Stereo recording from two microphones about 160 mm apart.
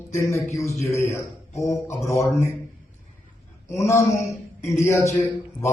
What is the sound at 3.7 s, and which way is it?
A man's voice, 20° left (ahead or behind).